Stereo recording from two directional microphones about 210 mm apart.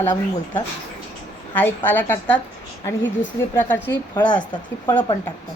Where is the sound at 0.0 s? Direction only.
10° left (ahead or behind).